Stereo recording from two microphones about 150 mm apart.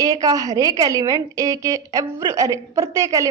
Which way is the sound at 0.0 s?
25° right (ahead or behind).